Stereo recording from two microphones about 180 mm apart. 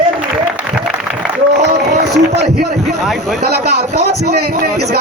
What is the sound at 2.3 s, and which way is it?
A man's voice, 65° right (ahead or behind).